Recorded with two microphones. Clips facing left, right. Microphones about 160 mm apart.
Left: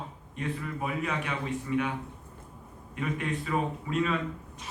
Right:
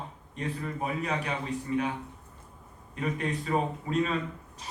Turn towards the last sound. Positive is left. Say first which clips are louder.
# even
turn(degrees=-35)  # may be behind; listen again after turning